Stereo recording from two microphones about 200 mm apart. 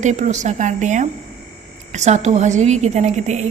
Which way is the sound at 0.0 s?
35° right (ahead or behind).